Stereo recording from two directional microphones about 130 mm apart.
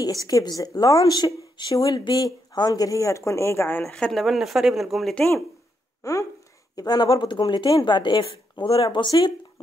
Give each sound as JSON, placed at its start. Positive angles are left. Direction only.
{"t": 0.0, "sound": "a woman's voice", "side_deg": 30}
{"t": 3.8, "sound": "speech", "side_deg": 5}
{"t": 6.0, "sound": "a sound", "side_deg": 25}
{"t": 6.7, "sound": "speech", "side_deg": 30}